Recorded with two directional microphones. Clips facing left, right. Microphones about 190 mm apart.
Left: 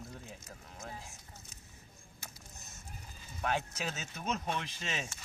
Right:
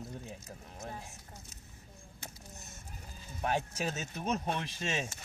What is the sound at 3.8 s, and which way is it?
Speech, 45° right (ahead or behind).